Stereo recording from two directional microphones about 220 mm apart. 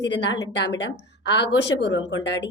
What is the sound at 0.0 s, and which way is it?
A woman's voice, 55° left (ahead or behind).